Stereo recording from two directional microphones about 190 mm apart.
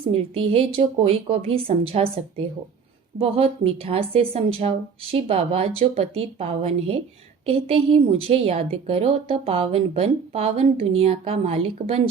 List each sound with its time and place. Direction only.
0.1 s speech: 30° right (ahead or behind)